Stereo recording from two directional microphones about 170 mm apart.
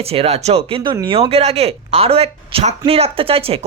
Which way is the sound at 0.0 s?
35° right (ahead or behind).